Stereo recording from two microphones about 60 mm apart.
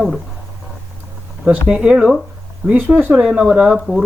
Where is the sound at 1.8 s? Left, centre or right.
Centre.